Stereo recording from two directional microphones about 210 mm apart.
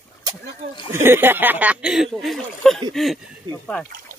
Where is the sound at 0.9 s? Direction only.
10° right (ahead or behind).